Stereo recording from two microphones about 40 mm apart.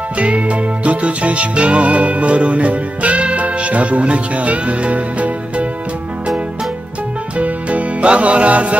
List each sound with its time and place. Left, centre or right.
0.2 s music: right
7.3 s music: right